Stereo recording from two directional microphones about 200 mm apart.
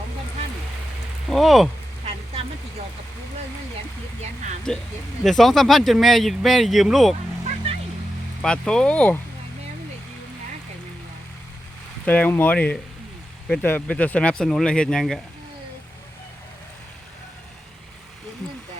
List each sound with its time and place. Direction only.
1.3 s speech: centre (ahead or behind)
4.7 s speech: centre (ahead or behind)
7.4 s vehicle: 30° right (ahead or behind)
8.4 s speech: 5° left (ahead or behind)
12.0 s speech: 5° left (ahead or behind)